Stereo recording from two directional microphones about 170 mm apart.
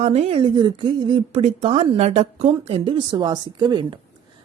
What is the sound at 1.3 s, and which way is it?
A woman's voice, 40° right (ahead or behind).